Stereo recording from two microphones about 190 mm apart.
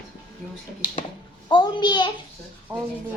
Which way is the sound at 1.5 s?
25° left (ahead or behind).